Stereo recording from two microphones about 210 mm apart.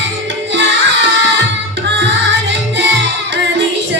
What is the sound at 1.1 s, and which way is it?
Music, 55° right (ahead or behind).